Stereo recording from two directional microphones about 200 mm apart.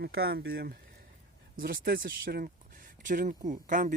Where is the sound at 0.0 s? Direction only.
50° right (ahead or behind).